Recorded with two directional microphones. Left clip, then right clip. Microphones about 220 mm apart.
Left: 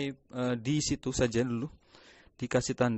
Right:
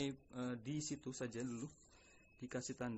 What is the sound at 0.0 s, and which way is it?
Speech, 30° left (ahead or behind).